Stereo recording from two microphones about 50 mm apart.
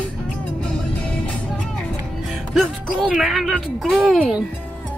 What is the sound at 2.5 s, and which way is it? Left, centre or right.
Speech, centre.